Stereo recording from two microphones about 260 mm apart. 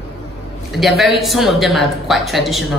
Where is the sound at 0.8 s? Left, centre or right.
Centre.